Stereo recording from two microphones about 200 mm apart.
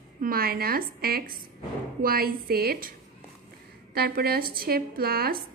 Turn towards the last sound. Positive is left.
turn(degrees=-50)  # may be behind; listen again after turning